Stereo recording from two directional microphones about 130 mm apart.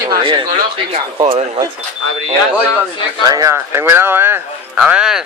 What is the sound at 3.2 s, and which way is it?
A man's voice, 25° right (ahead or behind).